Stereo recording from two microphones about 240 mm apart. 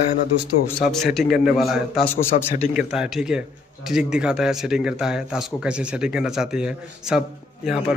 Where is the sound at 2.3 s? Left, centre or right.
Left.